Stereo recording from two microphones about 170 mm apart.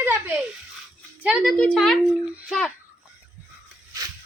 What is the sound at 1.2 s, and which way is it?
A woman's voice, 5° right (ahead or behind).